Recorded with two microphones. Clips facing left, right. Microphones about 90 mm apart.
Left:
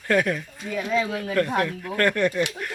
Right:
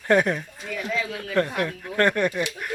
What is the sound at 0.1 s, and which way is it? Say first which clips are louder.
Speech: right 2 dB; 25° right (ahead or behind).